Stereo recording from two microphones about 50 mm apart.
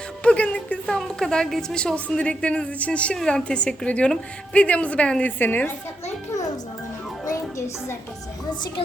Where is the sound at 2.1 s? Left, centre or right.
Left.